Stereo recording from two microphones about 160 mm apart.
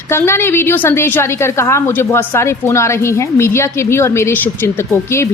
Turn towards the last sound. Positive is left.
turn(degrees=15)  # may be behind; listen again after turning